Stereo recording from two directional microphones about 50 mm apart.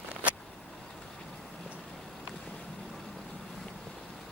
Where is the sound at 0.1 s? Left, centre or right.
Right.